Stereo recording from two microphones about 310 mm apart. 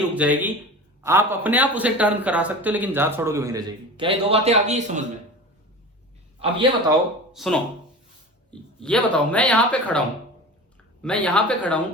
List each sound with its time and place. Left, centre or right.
0.1 s a man's voice: centre; by 5.0 s right
6.4 s a man's voice: centre
7.3 s speech: centre
11.0 s speech: centre